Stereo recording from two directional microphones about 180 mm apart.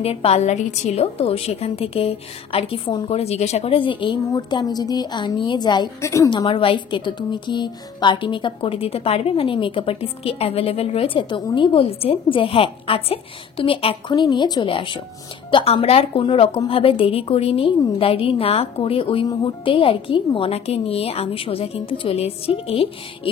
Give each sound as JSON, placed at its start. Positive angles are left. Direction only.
{"t": 0.0, "sound": "a woman's voice", "side_deg": 35}